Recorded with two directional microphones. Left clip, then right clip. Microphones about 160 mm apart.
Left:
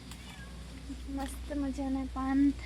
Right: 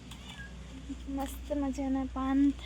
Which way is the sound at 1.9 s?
20° right (ahead or behind).